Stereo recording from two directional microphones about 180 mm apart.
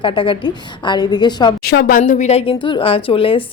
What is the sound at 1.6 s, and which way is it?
A woman's voice, 60° left (ahead or behind).